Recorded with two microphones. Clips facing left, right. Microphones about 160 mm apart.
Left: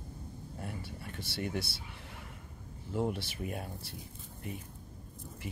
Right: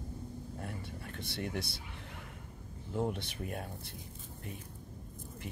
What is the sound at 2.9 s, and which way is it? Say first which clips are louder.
Speech: left 1 dB; 5° left (ahead or behind).